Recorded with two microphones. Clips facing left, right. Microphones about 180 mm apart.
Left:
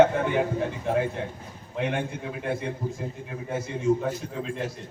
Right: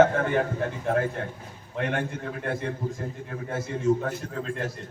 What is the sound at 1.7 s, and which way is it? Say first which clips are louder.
A man's voice: even; 5° left (ahead or behind).